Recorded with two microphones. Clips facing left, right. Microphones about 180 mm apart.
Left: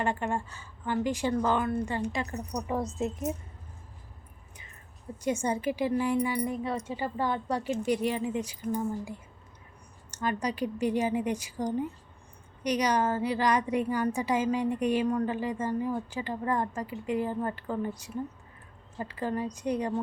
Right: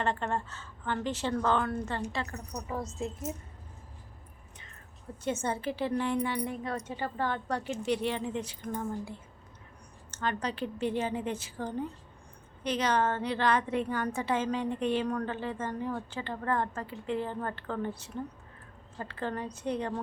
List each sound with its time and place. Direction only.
0.0 s a woman's voice: 10° left (ahead or behind)
2.5 s a woman's voice: 30° left (ahead or behind)
5.2 s a woman's voice: 10° left (ahead or behind)